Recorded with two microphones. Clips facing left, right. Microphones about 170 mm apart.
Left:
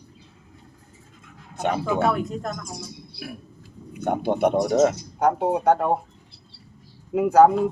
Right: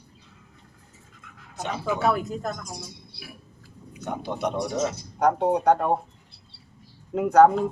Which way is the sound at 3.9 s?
55° left (ahead or behind).